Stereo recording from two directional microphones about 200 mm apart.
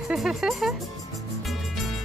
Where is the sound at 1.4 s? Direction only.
Centre (ahead or behind).